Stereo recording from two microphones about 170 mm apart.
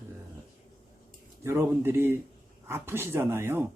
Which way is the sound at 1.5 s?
15° right (ahead or behind).